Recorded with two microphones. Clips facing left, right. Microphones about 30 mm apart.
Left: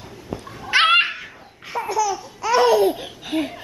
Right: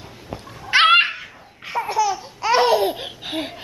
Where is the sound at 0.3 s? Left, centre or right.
Right.